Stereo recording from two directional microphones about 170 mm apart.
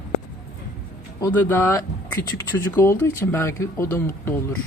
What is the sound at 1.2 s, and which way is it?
Speech, 15° left (ahead or behind).